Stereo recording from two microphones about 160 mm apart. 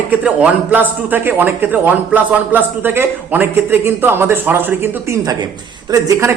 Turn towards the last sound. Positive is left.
turn(degrees=-20)  # may be behind; listen again after turning